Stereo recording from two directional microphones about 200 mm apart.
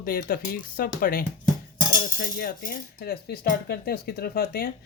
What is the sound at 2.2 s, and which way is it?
Speech, 45° left (ahead or behind).